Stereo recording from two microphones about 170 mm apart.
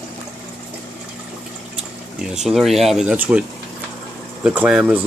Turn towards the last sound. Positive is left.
turn(degrees=-10)  # may be behind; listen again after turning